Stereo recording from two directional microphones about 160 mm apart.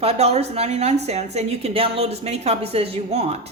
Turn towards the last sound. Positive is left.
turn(degrees=-40)  # may be behind; listen again after turning